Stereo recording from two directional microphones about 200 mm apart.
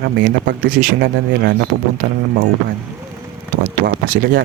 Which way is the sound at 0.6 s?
45° right (ahead or behind).